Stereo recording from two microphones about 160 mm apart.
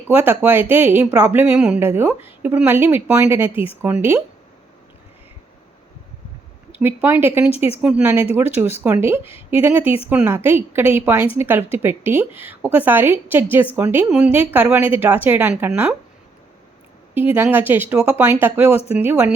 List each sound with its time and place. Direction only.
0.1 s a woman's voice: 10° right (ahead or behind)
3.5 s speech: 35° left (ahead or behind)
3.8 s a woman's voice: 15° right (ahead or behind)
6.7 s a woman's voice: 10° right (ahead or behind)
17.3 s a woman's voice: 15° right (ahead or behind)